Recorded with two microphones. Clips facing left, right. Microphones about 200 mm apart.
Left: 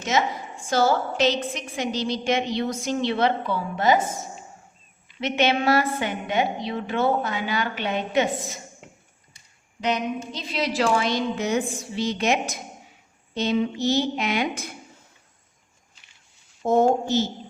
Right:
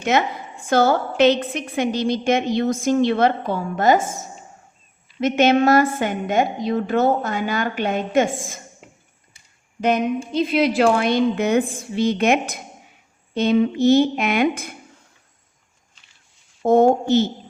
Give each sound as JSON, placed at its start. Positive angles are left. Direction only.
{"t": 0.0, "sound": "a woman's voice", "side_deg": -60}
{"t": 10.3, "sound": "a woman's voice", "side_deg": -55}
{"t": 16.6, "sound": "a woman's voice", "side_deg": -60}